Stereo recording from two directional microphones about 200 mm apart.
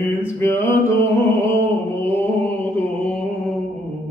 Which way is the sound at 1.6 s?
10° left (ahead or behind).